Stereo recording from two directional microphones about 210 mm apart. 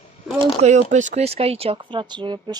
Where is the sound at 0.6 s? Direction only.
35° right (ahead or behind).